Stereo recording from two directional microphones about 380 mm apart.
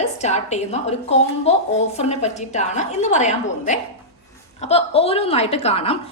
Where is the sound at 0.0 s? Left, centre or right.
Centre.